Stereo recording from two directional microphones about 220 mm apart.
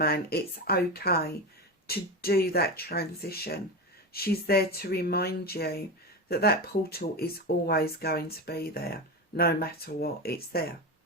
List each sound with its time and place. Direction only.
0.0 s speech: 45° left (ahead or behind)